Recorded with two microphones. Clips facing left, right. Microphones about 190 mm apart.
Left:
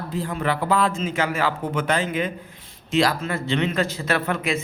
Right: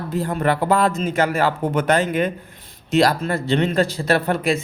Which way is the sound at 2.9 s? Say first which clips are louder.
Right 4 dB; 40° right (ahead or behind).